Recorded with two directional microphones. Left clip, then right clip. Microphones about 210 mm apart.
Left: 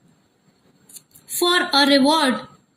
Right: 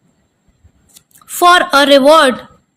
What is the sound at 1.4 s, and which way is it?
Speech, 45° right (ahead or behind).